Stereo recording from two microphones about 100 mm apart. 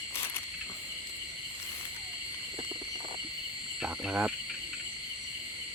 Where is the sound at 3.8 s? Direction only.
10° right (ahead or behind).